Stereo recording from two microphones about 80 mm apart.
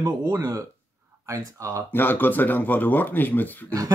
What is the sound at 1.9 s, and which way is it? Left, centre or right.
Speech, left.